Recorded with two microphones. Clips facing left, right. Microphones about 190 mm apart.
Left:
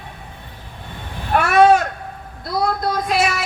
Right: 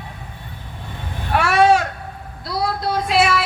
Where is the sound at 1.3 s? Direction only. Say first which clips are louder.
Left 1 dB; 50° left (ahead or behind).